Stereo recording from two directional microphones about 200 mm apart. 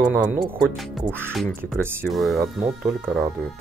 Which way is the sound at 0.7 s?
Centre (ahead or behind).